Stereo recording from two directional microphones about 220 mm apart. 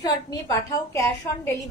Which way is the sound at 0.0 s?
15° left (ahead or behind).